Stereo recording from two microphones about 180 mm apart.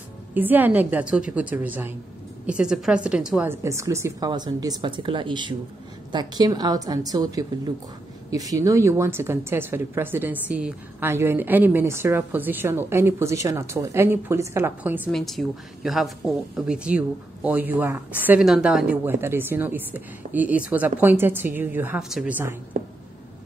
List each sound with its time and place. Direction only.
0.3 s a woman's voice: 10° right (ahead or behind)
15.0 s a woman's voice: centre (ahead or behind)